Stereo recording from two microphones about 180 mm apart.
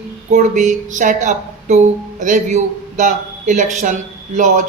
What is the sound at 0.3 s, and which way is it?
Speech, 45° right (ahead or behind).